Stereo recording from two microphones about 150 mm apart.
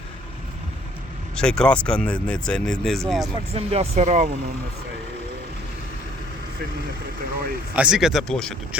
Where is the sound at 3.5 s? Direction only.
45° right (ahead or behind).